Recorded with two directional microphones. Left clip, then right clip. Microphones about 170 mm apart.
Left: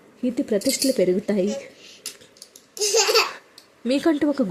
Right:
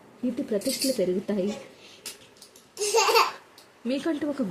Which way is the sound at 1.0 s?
35° left (ahead or behind).